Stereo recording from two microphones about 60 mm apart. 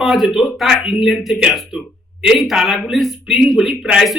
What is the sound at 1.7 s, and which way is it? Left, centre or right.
Speech, centre.